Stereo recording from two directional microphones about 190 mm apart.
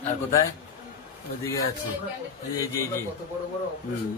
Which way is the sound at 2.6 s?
15° left (ahead or behind).